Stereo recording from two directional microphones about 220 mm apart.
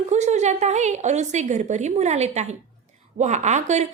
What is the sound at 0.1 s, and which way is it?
A woman's voice, 30° right (ahead or behind).